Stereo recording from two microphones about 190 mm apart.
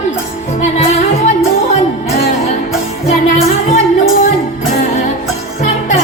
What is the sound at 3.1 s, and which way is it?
Music, 45° left (ahead or behind).